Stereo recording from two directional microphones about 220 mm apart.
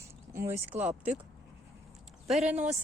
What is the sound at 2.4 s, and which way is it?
Speech, 30° right (ahead or behind).